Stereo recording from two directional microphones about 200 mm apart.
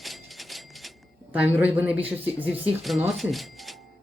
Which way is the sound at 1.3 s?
5° right (ahead or behind).